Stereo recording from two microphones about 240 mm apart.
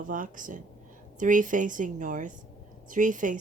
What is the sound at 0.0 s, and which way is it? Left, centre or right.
A woman's voice, right.